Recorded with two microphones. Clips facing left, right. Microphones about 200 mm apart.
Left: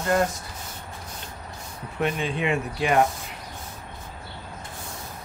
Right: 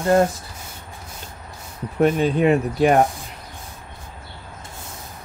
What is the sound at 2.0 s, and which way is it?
Speech, 40° right (ahead or behind).